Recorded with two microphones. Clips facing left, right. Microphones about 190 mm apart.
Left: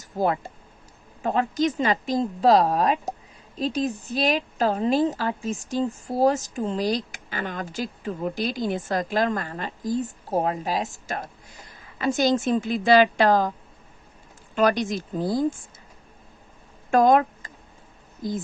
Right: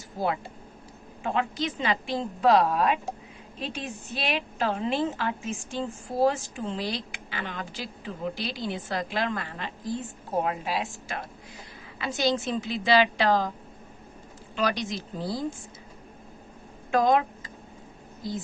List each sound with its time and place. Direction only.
0.2 s a woman's voice: 45° left (ahead or behind)
14.5 s a woman's voice: 50° left (ahead or behind)
16.9 s speech: 50° left (ahead or behind)